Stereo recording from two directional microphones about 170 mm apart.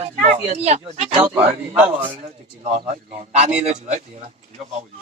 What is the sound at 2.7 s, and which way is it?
Speech, 40° right (ahead or behind).